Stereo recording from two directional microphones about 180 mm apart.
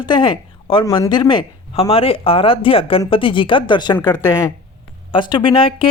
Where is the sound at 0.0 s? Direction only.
25° left (ahead or behind).